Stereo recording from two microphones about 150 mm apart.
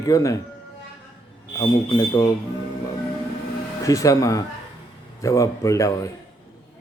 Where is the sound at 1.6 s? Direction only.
25° left (ahead or behind).